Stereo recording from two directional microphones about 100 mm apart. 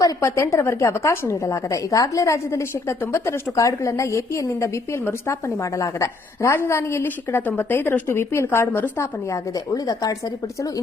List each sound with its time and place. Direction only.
0.0 s a woman's voice: 30° left (ahead or behind)
9.7 s a woman's voice: 40° left (ahead or behind)